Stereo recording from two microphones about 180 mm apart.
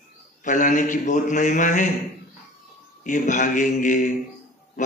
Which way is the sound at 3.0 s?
45° left (ahead or behind).